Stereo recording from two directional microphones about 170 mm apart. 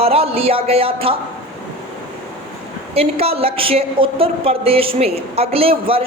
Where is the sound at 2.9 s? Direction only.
35° right (ahead or behind).